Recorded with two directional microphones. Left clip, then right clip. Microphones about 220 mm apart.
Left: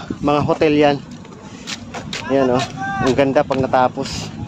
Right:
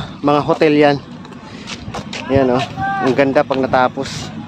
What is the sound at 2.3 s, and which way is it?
Speech, 5° right (ahead or behind).